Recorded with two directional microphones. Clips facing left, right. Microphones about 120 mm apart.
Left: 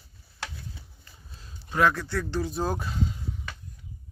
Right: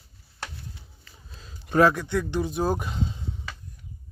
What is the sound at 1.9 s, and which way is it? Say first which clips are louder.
Speech: right 3 dB; 15° right (ahead or behind).